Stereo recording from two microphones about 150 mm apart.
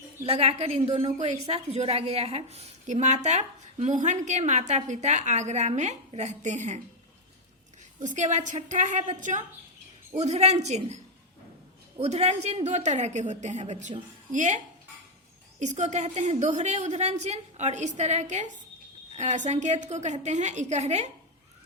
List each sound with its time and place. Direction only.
0.3 s a woman's voice: 45° right (ahead or behind)
7.9 s a woman's voice: 55° right (ahead or behind)
11.9 s a woman's voice: 45° right (ahead or behind)